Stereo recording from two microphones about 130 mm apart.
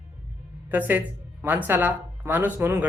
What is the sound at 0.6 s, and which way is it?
Speech, 15° right (ahead or behind).